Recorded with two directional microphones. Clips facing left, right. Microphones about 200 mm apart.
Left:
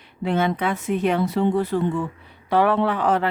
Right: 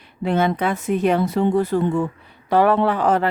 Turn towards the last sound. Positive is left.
turn(degrees=-40)  # may be behind; listen again after turning